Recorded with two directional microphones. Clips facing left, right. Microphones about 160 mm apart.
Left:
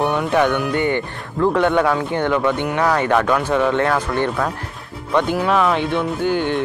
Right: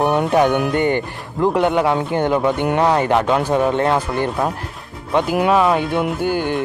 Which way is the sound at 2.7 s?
25° right (ahead or behind).